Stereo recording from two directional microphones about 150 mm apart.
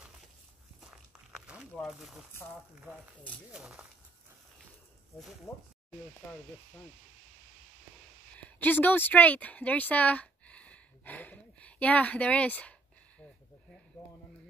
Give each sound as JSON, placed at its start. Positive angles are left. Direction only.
{"t": 0.7, "sound": "walk", "side_deg": -5}
{"t": 3.5, "sound": "speech", "side_deg": -5}
{"t": 5.5, "sound": "speech", "side_deg": 20}
{"t": 8.4, "sound": "speech", "side_deg": 10}